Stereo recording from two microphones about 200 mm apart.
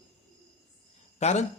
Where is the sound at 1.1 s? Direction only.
35° left (ahead or behind).